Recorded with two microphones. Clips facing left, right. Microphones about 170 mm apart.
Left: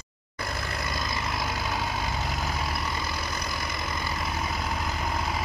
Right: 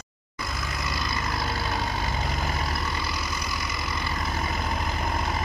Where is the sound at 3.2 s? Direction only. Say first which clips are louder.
Right 1 dB; 55° left (ahead or behind).